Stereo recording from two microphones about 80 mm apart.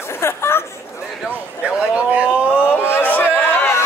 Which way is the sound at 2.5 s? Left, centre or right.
Left.